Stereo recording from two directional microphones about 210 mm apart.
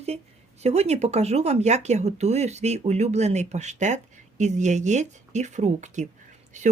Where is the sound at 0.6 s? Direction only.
30° right (ahead or behind).